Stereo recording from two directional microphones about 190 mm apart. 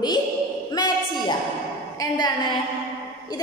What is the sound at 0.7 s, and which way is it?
A woman's voice, 20° left (ahead or behind).